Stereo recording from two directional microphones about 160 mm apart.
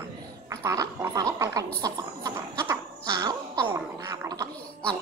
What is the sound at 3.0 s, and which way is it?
Gargling, 25° right (ahead or behind).